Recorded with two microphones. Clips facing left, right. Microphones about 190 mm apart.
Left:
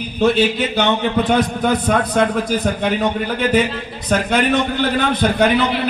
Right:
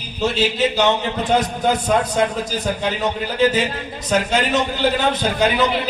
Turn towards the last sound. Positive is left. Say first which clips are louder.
# left 3 dB
turn(degrees=60)  # may be behind; listen again after turning